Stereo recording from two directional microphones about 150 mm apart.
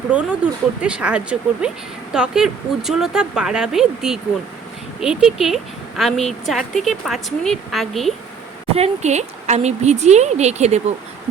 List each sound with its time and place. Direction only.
0.1 s a woman's voice: 5° right (ahead or behind)
8.7 s speech: 45° right (ahead or behind)